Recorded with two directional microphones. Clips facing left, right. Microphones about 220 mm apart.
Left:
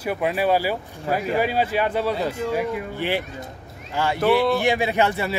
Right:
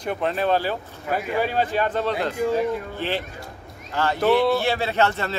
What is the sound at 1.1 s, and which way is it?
Speech, 35° left (ahead or behind).